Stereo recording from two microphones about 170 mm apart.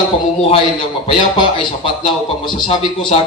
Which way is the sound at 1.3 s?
30° left (ahead or behind).